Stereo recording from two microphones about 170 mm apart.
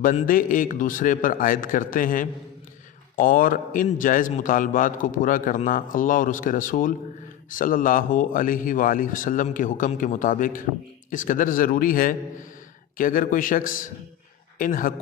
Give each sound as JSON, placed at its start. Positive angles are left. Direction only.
{"t": 0.0, "sound": "a man's voice", "side_deg": 55}